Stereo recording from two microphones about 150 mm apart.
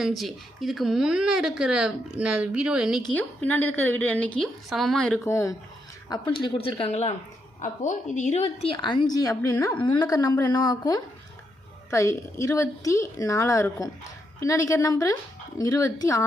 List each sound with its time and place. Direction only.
0.0 s speech: centre (ahead or behind)
3.1 s a woman's voice: 10° left (ahead or behind)
5.2 s a woman's voice: 20° left (ahead or behind)
6.1 s speech: 30° left (ahead or behind)
7.6 s a woman's voice: 55° left (ahead or behind)
8.7 s a woman's voice: 30° left (ahead or behind)
9.8 s a woman's voice: 30° left (ahead or behind)